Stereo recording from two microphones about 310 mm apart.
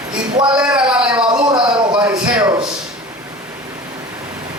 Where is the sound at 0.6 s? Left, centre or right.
Centre.